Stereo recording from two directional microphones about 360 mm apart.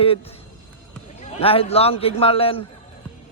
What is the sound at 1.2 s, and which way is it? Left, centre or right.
A man's voice, centre.